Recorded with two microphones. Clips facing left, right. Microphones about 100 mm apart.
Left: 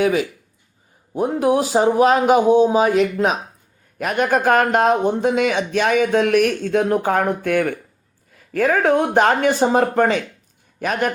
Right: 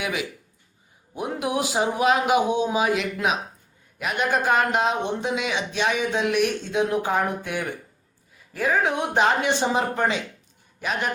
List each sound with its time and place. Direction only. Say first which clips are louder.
0.0 s a man's voice: left 10 dB; 40° left (ahead or behind)